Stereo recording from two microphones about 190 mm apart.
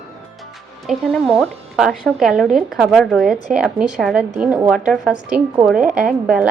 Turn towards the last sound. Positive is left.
turn(degrees=-5)  # may be behind; listen again after turning